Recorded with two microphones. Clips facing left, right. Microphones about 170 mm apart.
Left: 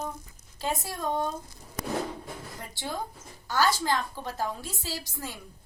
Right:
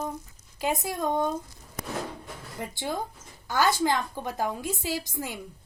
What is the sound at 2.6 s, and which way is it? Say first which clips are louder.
A woman's voice: right 5 dB; 20° right (ahead or behind).